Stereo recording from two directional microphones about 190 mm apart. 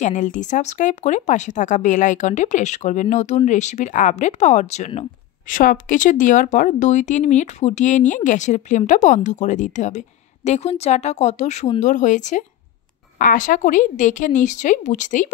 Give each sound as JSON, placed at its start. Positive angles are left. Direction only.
{"t": 0.0, "sound": "speech", "side_deg": 40}
{"t": 5.5, "sound": "speech", "side_deg": 45}